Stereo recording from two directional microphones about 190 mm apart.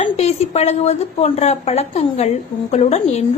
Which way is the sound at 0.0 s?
35° left (ahead or behind).